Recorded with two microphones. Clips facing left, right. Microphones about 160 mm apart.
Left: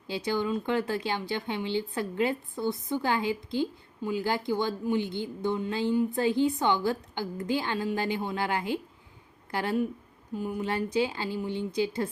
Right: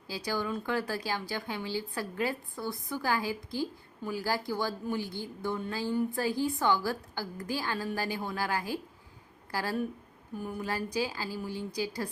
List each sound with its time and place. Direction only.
0.1 s speech: 25° left (ahead or behind)